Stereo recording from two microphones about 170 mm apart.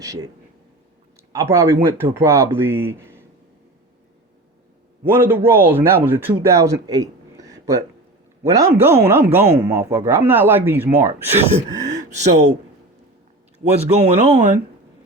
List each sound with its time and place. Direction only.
0.0 s speech: 20° right (ahead or behind)
1.3 s a man's voice: 20° right (ahead or behind)
5.0 s a man's voice: 15° right (ahead or behind)
12.1 s speech: 40° right (ahead or behind)
13.9 s speech: 40° right (ahead or behind)